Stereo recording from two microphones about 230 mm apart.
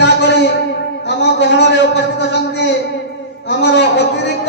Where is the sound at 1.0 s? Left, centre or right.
Left.